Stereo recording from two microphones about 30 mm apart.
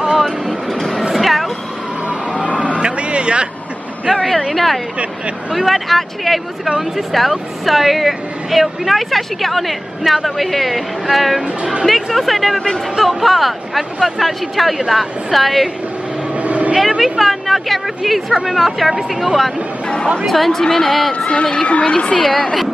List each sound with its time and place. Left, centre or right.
0.2 s vehicle: centre
0.7 s speech: centre
1.1 s music: centre
2.5 s a sound: left
3.0 s a sound: right
4.2 s speech: centre
11.4 s speech: right
11.8 s speech: centre
16.3 s vehicle: right
17.0 s speech: centre
20.6 s speech: centre
21.6 s a woman's voice: left
22.2 s speech: centre